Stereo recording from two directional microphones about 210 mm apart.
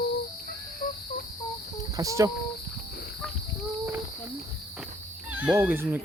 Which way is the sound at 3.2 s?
5° left (ahead or behind).